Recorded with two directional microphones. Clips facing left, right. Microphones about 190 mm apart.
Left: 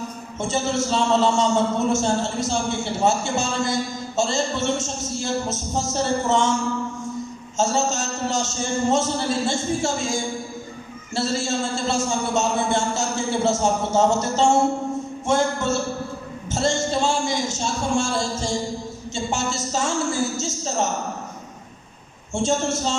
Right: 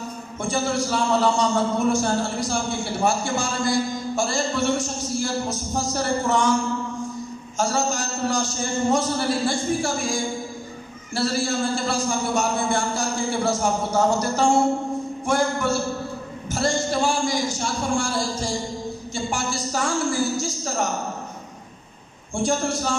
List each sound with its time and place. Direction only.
0.4 s a man's voice: 25° left (ahead or behind)
7.5 s a man's voice: 25° left (ahead or behind)
22.3 s a man's voice: 25° left (ahead or behind)